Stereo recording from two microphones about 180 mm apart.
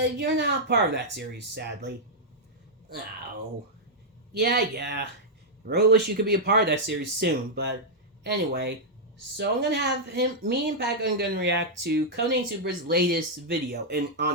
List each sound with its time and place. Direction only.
0.0 s speech: 65° right (ahead or behind)
4.4 s speech: 60° right (ahead or behind)